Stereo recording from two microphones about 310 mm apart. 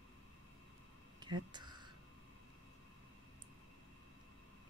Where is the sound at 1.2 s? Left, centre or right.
Centre.